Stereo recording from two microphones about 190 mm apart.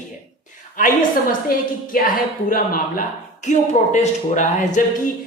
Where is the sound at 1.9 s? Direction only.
50° left (ahead or behind).